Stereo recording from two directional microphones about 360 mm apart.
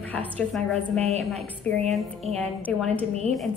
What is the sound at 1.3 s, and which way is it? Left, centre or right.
A woman's voice, centre.